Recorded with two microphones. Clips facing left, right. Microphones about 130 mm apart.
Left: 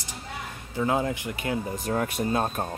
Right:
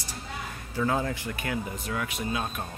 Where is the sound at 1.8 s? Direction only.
45° left (ahead or behind).